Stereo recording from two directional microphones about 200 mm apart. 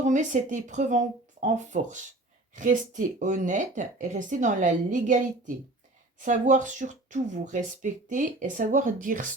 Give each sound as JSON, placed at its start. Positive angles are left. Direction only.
{"t": 0.0, "sound": "speech", "side_deg": -40}